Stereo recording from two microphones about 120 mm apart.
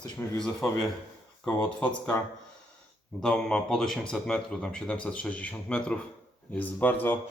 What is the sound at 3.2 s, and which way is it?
Speech, 5° left (ahead or behind).